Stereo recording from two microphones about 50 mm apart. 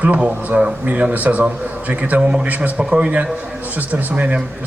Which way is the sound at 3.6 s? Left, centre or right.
Right.